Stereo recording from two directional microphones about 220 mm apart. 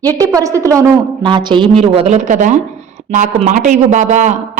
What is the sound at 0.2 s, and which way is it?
A woman's voice, 15° right (ahead or behind).